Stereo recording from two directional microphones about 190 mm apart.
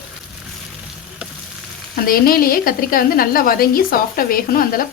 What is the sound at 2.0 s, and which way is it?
A woman's voice, 50° left (ahead or behind).